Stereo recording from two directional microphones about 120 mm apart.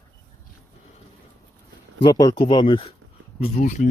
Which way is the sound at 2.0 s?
35° left (ahead or behind).